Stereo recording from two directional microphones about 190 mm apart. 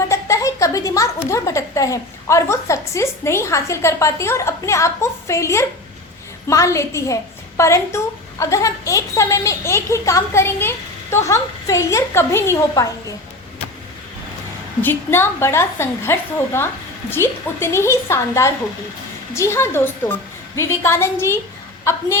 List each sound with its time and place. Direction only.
0.1 s a woman's voice: 15° left (ahead or behind)
14.8 s a woman's voice: 10° left (ahead or behind)